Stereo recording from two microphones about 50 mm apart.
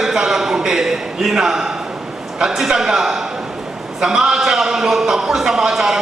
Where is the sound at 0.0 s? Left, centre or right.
Centre.